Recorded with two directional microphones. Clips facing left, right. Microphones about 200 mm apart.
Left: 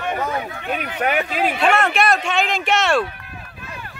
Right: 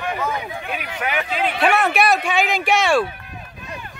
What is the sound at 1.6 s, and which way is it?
Speech, 5° right (ahead or behind).